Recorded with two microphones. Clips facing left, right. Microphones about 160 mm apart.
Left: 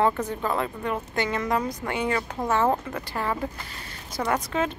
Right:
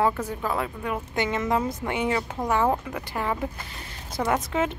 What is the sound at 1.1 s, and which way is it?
A woman's voice, 20° right (ahead or behind).